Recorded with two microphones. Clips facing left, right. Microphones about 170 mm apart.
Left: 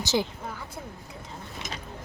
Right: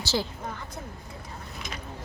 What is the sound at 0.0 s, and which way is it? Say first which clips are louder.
Speech: left 3 dB; 20° left (ahead or behind).